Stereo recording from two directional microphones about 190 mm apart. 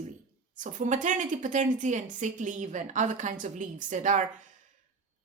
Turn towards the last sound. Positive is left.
turn(degrees=-40)  # may be behind; listen again after turning